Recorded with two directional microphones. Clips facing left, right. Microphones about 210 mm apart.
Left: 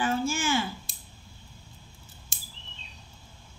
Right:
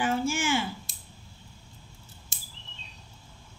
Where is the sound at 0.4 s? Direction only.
25° right (ahead or behind).